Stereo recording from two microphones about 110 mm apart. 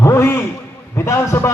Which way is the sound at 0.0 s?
25° left (ahead or behind).